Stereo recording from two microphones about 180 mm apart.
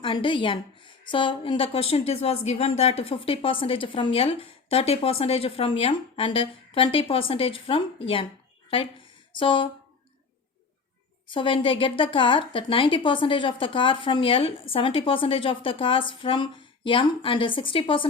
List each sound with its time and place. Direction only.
0.0 s a woman's voice: 25° left (ahead or behind)
9.3 s a woman's voice: 30° left (ahead or behind)
11.3 s a woman's voice: 30° left (ahead or behind)